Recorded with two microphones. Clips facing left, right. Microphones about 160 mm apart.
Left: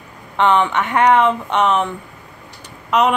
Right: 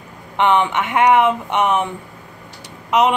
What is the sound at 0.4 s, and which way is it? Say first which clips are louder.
Speech: left 1 dB; 15° right (ahead or behind).